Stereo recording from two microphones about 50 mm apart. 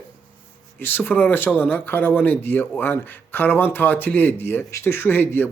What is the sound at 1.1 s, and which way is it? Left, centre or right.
Speech, left.